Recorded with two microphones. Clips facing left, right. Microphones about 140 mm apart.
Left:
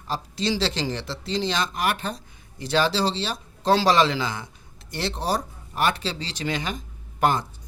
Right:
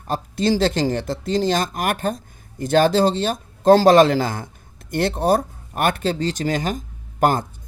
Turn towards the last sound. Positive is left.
turn(degrees=-45)  # may be behind; listen again after turning